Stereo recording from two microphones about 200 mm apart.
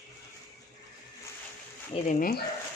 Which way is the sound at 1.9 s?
40° left (ahead or behind).